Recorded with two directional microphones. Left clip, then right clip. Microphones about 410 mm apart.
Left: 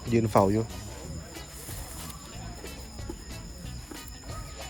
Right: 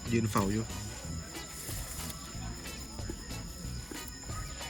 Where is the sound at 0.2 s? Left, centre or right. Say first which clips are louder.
Left 10 dB; centre.